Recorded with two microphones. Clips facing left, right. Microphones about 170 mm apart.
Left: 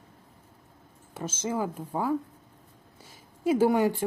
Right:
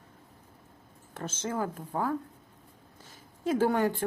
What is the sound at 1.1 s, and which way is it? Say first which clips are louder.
A woman's voice: left 3 dB; 10° left (ahead or behind).